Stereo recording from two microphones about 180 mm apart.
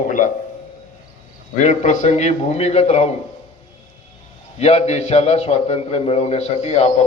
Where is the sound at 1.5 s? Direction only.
40° left (ahead or behind).